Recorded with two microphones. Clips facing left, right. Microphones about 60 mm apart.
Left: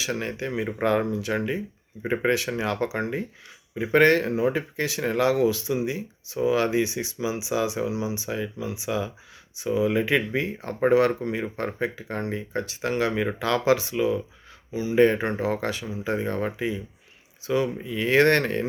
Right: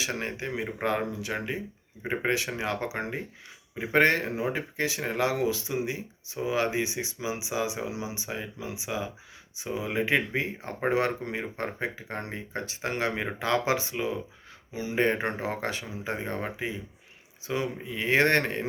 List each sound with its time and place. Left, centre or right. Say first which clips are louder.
0.0 s speech: left 3 dB; right
0.4 s speech: left 6 dB; centre